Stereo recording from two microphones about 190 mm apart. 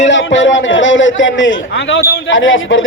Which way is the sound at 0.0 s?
75° left (ahead or behind).